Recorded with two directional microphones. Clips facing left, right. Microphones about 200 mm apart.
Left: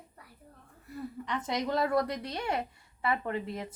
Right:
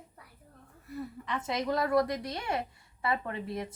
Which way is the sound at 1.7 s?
25° left (ahead or behind).